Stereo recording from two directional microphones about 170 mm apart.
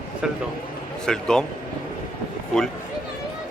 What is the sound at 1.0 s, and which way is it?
Speech, 5° left (ahead or behind).